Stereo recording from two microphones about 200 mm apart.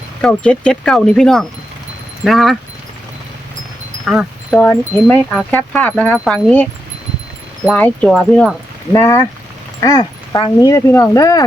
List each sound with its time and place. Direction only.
0.2 s speech: 5° left (ahead or behind)
4.0 s speech: centre (ahead or behind)
8.9 s speech: 15° left (ahead or behind)